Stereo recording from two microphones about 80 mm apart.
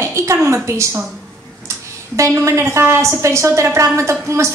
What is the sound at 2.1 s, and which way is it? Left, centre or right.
A woman's voice, right.